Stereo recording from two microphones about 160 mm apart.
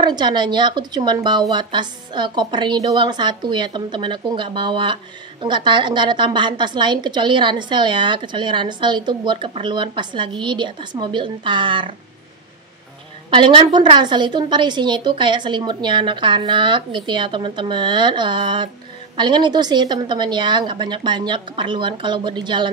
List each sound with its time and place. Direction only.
0.0 s a woman's voice: 25° right (ahead or behind)
13.3 s a woman's voice: 30° right (ahead or behind)